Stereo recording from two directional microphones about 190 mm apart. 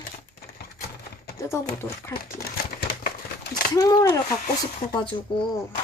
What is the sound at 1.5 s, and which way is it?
Speech, 15° left (ahead or behind).